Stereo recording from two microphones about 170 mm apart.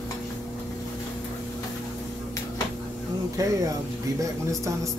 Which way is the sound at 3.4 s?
20° right (ahead or behind).